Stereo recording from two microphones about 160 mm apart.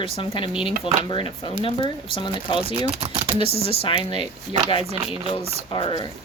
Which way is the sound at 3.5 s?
35° left (ahead or behind).